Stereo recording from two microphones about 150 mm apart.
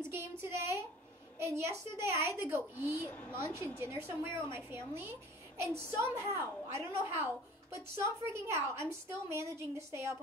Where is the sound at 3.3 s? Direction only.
15° right (ahead or behind).